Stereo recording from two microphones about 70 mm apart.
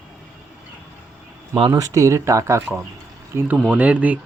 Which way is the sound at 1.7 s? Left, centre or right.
Right.